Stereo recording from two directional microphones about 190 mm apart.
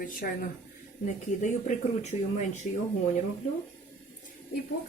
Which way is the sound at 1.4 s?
40° left (ahead or behind).